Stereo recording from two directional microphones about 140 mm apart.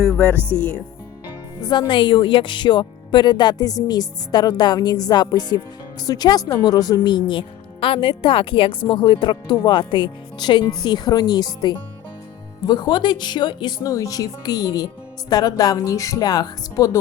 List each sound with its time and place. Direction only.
0.1 s speech: 10° left (ahead or behind)
1.6 s speech: 30° left (ahead or behind)